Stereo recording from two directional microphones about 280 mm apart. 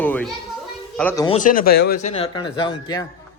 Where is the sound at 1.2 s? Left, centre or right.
Left.